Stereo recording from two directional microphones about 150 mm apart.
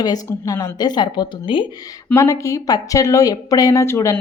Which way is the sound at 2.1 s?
20° left (ahead or behind).